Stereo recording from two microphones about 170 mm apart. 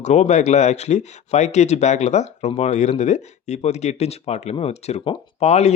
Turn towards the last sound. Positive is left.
turn(degrees=40)  # may be behind; listen again after turning